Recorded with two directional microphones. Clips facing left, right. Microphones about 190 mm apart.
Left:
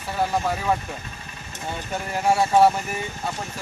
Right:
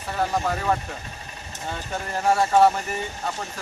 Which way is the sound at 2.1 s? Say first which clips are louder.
Left 1 dB; 10° left (ahead or behind).